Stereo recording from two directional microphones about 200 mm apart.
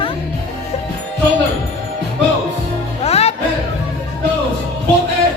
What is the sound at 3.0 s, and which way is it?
Music, 30° left (ahead or behind).